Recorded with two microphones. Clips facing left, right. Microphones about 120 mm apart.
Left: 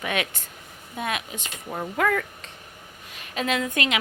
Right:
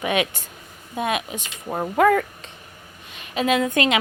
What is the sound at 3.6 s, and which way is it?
Speech, 30° right (ahead or behind).